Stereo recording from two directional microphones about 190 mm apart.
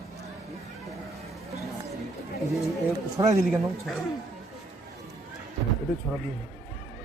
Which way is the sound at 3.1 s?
20° right (ahead or behind).